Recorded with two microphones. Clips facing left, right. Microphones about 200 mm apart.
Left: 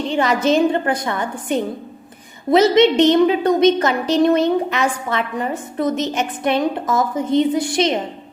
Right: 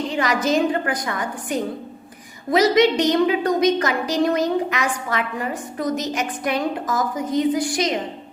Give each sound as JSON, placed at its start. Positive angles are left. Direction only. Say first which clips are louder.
{"t": 0.1, "sound": "a woman's voice", "louder": "left 5 dB", "side_deg": 25}